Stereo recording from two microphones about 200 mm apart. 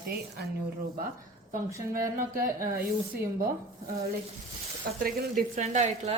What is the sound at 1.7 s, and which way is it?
Speech, 15° right (ahead or behind).